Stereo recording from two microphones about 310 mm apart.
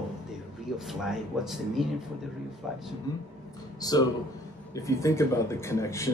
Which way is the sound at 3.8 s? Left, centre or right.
Centre.